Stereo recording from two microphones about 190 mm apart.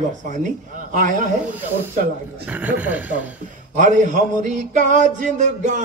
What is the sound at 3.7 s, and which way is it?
A man's voice, 40° right (ahead or behind).